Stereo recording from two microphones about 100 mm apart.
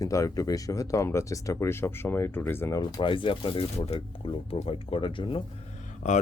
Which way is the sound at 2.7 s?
55° left (ahead or behind).